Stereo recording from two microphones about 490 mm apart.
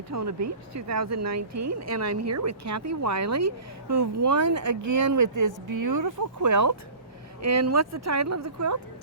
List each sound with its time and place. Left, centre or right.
0.1 s speech: right